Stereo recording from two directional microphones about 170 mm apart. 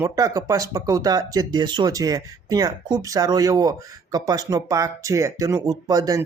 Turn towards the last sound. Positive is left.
turn(degrees=-20)  # may be behind; listen again after turning